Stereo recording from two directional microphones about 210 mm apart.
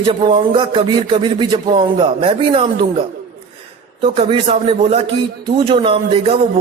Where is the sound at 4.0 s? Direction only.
25° right (ahead or behind).